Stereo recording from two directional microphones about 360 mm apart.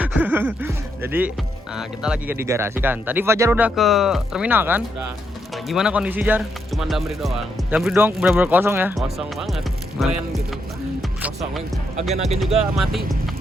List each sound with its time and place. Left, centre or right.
0.0 s speech: centre
12.1 s speech: centre
12.4 s speech: centre